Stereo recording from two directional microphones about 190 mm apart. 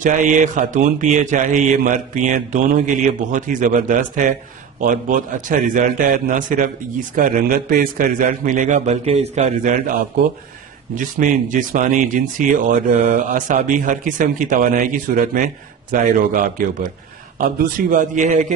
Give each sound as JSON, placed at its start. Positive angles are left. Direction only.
{"t": 0.0, "sound": "a man's voice", "side_deg": -40}